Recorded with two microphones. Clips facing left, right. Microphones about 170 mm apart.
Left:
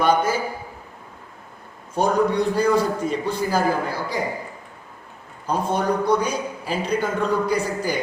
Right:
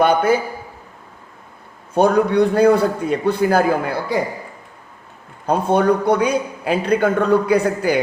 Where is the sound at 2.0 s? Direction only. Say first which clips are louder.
Right 5 dB; 60° right (ahead or behind).